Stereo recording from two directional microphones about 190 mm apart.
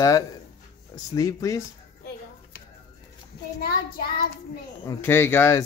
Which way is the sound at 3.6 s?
55° left (ahead or behind).